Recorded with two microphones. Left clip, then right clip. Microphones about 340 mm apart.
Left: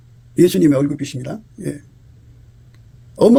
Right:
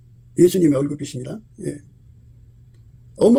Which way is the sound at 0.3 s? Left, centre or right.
Left.